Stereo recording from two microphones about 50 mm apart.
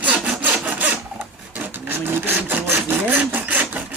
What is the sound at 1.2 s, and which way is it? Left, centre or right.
Wood, right.